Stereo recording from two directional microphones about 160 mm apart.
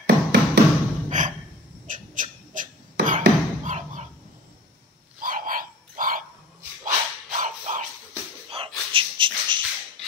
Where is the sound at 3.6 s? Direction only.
50° right (ahead or behind).